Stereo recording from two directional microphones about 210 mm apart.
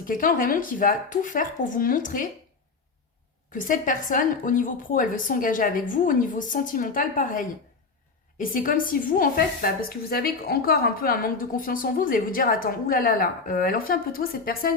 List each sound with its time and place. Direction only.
0.0 s a woman's voice: 40° left (ahead or behind)
3.5 s a woman's voice: 40° left (ahead or behind)